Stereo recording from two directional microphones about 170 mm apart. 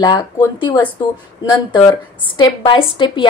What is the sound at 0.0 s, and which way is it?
A woman's voice, 25° left (ahead or behind).